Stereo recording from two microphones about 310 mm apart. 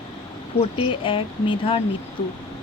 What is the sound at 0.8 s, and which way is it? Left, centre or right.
Speech, centre.